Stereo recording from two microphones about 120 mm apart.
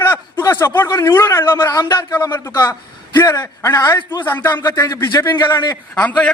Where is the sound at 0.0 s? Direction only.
20° left (ahead or behind).